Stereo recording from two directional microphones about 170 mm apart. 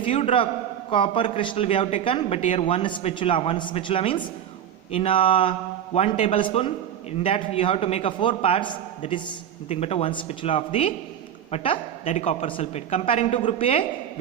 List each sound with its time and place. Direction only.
0.0 s a man's voice: 30° left (ahead or behind)
6.4 s a man's voice: 30° left (ahead or behind)